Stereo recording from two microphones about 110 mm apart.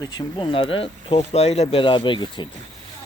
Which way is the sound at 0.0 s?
40° left (ahead or behind).